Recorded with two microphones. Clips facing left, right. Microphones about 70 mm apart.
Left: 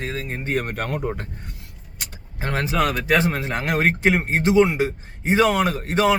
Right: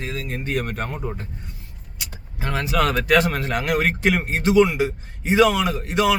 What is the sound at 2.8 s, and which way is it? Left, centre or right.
Speech, centre.